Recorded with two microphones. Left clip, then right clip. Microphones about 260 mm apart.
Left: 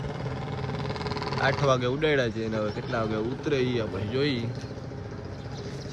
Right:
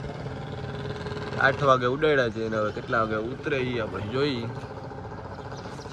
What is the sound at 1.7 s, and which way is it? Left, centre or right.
Speech, centre.